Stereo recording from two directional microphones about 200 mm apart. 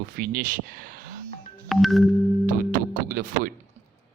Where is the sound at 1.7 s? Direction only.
Centre (ahead or behind).